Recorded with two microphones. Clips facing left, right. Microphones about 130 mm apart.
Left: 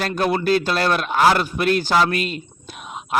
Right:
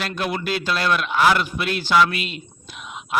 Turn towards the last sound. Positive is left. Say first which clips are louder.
# left 2 dB
turn(degrees=45)  # may be behind; listen again after turning